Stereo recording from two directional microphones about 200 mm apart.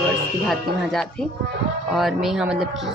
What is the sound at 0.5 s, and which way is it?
Speech, centre (ahead or behind).